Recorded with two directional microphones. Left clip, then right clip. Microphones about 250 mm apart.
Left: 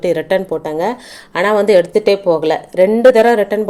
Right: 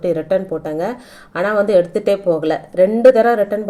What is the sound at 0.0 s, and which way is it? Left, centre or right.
Speech, centre.